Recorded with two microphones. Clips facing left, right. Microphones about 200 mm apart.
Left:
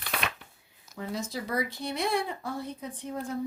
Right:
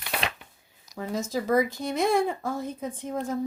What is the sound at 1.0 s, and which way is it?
Speech, 45° right (ahead or behind).